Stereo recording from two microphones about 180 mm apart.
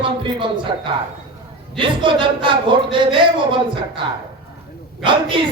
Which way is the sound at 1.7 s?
25° right (ahead or behind).